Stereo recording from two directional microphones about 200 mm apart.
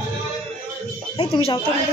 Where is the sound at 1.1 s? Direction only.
25° left (ahead or behind).